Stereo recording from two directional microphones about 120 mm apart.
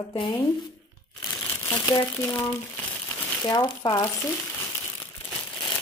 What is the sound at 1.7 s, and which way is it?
Speech, 35° left (ahead or behind).